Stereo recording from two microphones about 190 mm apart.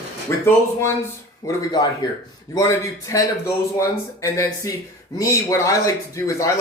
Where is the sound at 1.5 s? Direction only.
20° left (ahead or behind).